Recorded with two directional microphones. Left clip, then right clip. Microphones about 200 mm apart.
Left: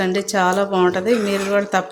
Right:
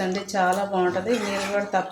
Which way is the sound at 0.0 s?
40° left (ahead or behind).